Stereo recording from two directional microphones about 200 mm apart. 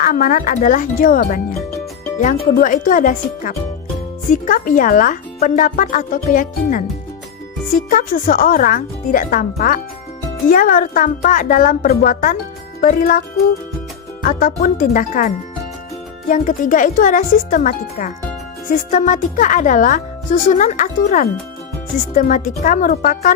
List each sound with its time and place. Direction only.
0.0 s speech: 45° left (ahead or behind)
2.6 s speech: 40° left (ahead or behind)
16.3 s speech: 40° left (ahead or behind)